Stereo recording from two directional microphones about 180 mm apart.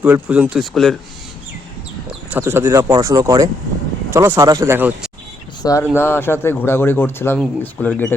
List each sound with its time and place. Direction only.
0.0 s speech: 5° right (ahead or behind)
2.0 s speech: 10° right (ahead or behind)
5.6 s speech: 15° left (ahead or behind)